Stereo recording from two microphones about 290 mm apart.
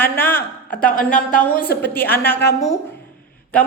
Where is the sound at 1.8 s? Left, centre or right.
Centre.